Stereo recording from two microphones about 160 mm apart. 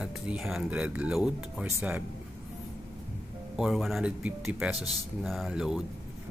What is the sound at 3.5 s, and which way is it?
Speech, centre (ahead or behind).